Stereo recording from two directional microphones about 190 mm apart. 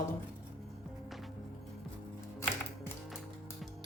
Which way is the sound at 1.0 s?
Centre (ahead or behind).